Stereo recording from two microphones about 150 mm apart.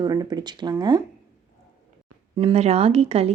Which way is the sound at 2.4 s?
40° right (ahead or behind).